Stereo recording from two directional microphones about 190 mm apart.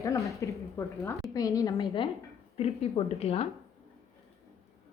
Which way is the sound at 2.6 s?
30° left (ahead or behind).